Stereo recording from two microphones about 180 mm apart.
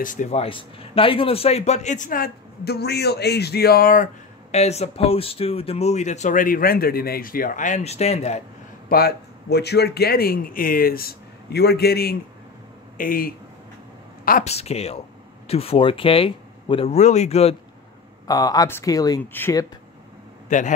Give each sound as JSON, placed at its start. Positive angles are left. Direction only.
{"t": 0.0, "sound": "a man's voice", "side_deg": 45}
{"t": 8.8, "sound": "a man's voice", "side_deg": 60}
{"t": 14.5, "sound": "a man's voice", "side_deg": 35}
{"t": 18.2, "sound": "speech", "side_deg": 20}
{"t": 20.4, "sound": "a man's voice", "side_deg": 45}